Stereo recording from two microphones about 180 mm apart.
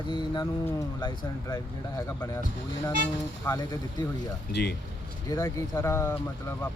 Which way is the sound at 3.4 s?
20° left (ahead or behind).